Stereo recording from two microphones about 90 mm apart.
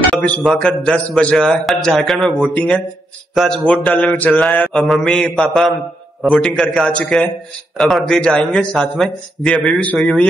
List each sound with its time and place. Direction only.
0.1 s a man's voice: centre (ahead or behind)
4.0 s mantra: 20° left (ahead or behind)
4.4 s a man's voice: 5° left (ahead or behind)